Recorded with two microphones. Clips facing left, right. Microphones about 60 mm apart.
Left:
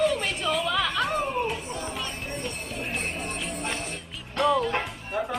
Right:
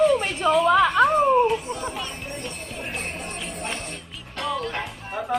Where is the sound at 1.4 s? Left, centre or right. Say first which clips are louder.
Right 7 dB; centre.